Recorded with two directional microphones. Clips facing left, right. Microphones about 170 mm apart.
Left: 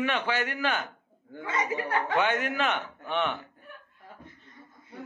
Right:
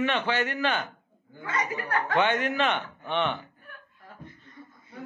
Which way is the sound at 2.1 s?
10° left (ahead or behind).